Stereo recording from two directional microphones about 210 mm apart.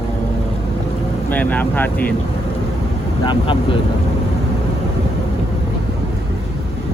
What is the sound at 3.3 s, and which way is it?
Speech, 25° left (ahead or behind).